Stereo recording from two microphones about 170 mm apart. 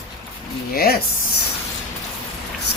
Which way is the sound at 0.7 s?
65° left (ahead or behind).